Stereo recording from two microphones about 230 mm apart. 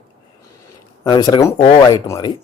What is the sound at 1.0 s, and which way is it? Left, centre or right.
Speech, centre.